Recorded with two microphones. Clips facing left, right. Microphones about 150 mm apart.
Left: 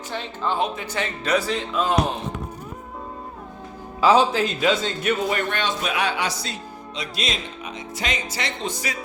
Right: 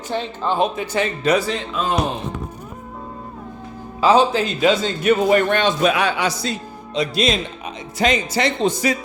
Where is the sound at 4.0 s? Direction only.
25° right (ahead or behind).